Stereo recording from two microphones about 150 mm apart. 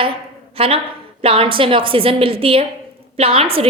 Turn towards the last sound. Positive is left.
turn(degrees=-40)  # may be behind; listen again after turning